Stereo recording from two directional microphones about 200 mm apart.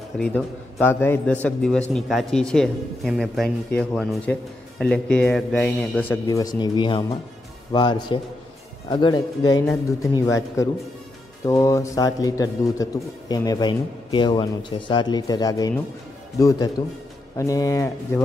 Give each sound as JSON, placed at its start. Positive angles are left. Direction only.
{"t": 0.2, "sound": "a man's voice", "side_deg": 5}